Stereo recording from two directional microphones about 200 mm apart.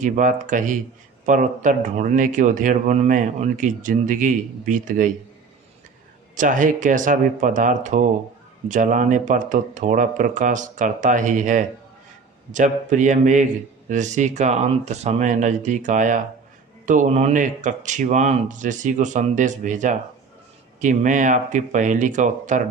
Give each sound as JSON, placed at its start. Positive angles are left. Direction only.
{"t": 0.0, "sound": "speech", "side_deg": -40}
{"t": 6.3, "sound": "speech", "side_deg": -40}